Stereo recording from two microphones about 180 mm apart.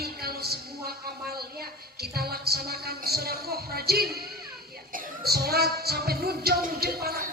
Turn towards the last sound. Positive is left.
turn(degrees=-60)  # may be behind; listen again after turning